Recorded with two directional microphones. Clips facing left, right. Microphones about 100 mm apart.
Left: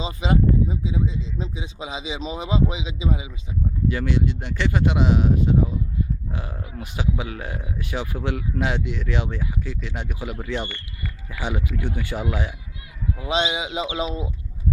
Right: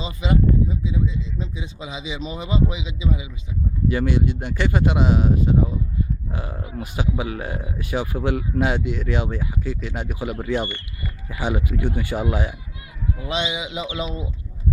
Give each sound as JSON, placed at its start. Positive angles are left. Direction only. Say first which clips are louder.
{"t": 0.0, "sound": "speech", "louder": "even", "side_deg": 30}
{"t": 3.8, "sound": "speech", "louder": "right 3 dB", "side_deg": -10}
{"t": 13.1, "sound": "speech", "louder": "left 3 dB", "side_deg": 25}